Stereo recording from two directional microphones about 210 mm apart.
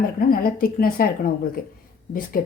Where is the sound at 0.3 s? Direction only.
45° left (ahead or behind).